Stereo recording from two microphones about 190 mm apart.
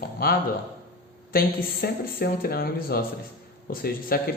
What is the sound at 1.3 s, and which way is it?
Speech, 50° left (ahead or behind).